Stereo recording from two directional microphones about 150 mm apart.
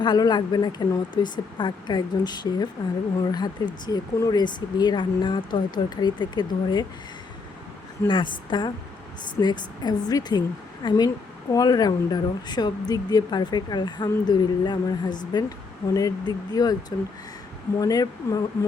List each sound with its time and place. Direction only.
0.0 s speech: 30° left (ahead or behind)
8.0 s a woman's voice: 35° left (ahead or behind)
17.7 s speech: 25° left (ahead or behind)